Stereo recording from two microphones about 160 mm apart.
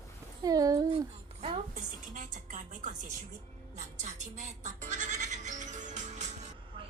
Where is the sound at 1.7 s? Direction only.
55° right (ahead or behind).